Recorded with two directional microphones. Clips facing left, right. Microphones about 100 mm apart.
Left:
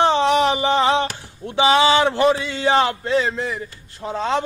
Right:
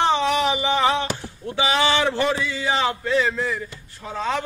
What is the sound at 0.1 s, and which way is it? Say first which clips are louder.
Music: left 3 dB; 35° left (ahead or behind).